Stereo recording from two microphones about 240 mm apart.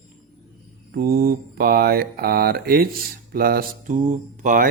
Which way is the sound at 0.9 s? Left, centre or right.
Right.